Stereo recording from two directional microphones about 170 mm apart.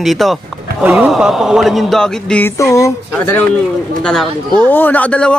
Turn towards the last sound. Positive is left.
turn(degrees=5)  # may be behind; listen again after turning